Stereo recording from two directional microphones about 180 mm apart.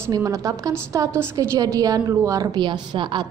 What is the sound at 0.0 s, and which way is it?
A woman's voice, 20° right (ahead or behind).